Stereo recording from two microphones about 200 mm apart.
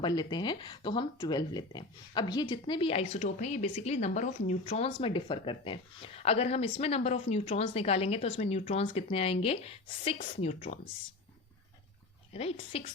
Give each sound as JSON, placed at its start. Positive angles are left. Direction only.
{"t": 0.0, "sound": "a woman's voice", "side_deg": 20}
{"t": 12.3, "sound": "speech", "side_deg": 30}